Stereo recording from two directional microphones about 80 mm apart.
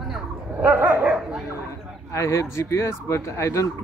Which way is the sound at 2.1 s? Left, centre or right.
Left.